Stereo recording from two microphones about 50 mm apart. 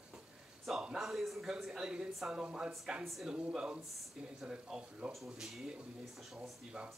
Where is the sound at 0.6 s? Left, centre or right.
Centre.